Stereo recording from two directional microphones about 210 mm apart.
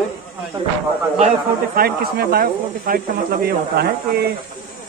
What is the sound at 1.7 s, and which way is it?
Speech, 45° right (ahead or behind).